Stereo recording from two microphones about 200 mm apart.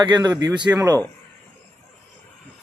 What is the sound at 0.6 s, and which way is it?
Speech, 10° right (ahead or behind).